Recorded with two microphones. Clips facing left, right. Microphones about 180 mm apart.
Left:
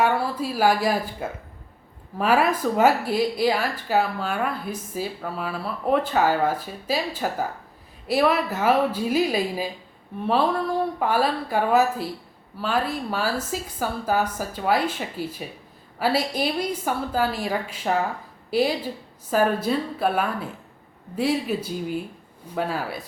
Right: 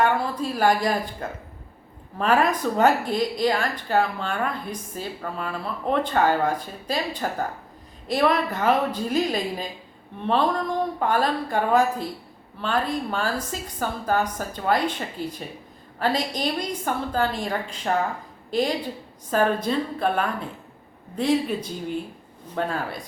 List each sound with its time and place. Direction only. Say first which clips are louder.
0.0 s a woman's voice: even; 5° left (ahead or behind)